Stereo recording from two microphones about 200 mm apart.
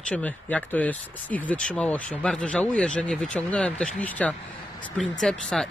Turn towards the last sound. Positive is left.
turn(degrees=0)  # may be behind; listen again after turning